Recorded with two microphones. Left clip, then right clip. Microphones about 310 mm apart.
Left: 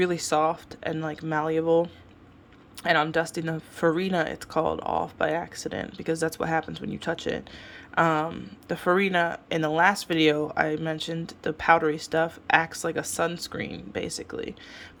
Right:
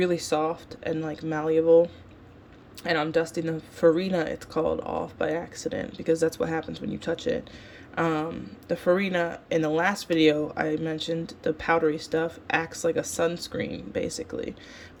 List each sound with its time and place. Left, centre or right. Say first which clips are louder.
0.0 s speech: left 1 dB; centre